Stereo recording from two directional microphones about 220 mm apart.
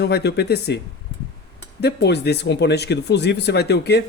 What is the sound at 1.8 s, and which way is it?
Speech, 50° left (ahead or behind).